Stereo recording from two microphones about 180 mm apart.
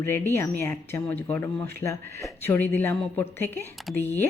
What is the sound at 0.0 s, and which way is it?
Speech, 15° left (ahead or behind).